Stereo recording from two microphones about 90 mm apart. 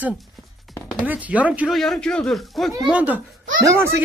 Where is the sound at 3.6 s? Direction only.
30° right (ahead or behind).